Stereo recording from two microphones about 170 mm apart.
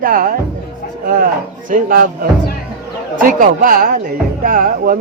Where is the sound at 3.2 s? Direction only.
55° right (ahead or behind).